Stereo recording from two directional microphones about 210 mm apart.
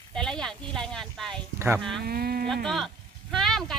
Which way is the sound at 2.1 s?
45° right (ahead or behind).